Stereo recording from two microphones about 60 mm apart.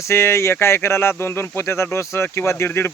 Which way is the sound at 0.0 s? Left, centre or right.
Left.